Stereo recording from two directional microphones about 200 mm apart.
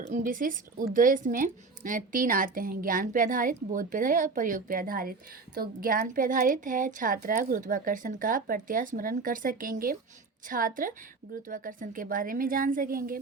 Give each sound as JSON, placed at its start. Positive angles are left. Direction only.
{"t": 0.0, "sound": "a woman's voice", "side_deg": -40}